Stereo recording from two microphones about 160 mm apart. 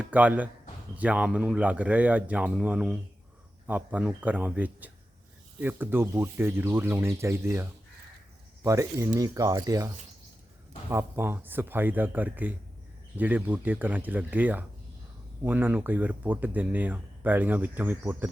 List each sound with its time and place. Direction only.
0.0 s speech: 10° right (ahead or behind)